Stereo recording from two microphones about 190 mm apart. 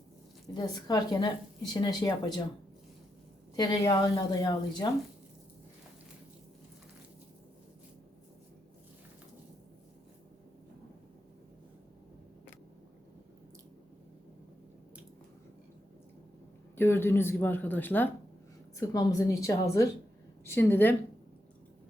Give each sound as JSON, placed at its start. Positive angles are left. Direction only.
{"t": 0.5, "sound": "a woman's voice", "side_deg": 20}
{"t": 3.5, "sound": "a woman's voice", "side_deg": 20}
{"t": 16.7, "sound": "speech", "side_deg": 10}